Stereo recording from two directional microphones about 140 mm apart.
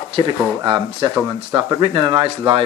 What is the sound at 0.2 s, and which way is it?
Speech, 35° right (ahead or behind).